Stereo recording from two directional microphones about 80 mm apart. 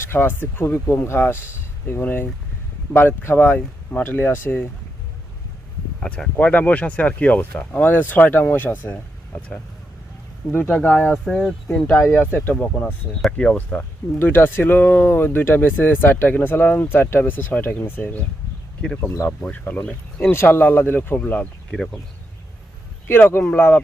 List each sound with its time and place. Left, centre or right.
0.0 s speech: left
6.0 s speech: centre
11.3 s speech: centre
11.9 s speech: left
14.2 s speech: left
19.5 s speech: left
23.0 s speech: left